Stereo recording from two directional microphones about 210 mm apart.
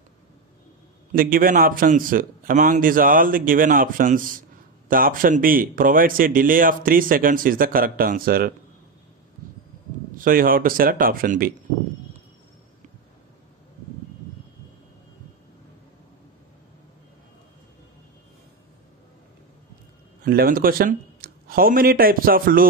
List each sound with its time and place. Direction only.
1.1 s speech: 45° right (ahead or behind)
10.1 s speech: 40° right (ahead or behind)
20.2 s a man's voice: 45° right (ahead or behind)